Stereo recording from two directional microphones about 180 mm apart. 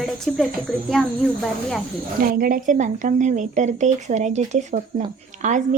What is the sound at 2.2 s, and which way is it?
Speech, 55° right (ahead or behind).